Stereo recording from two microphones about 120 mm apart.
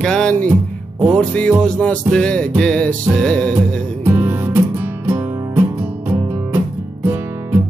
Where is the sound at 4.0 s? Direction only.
20° right (ahead or behind).